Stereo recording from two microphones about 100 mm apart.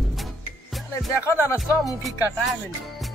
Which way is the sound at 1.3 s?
30° left (ahead or behind).